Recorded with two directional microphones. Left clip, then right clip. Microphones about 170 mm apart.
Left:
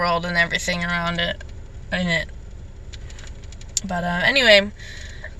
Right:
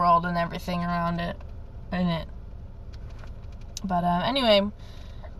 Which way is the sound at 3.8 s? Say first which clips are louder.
Left 4 dB; 5° right (ahead or behind).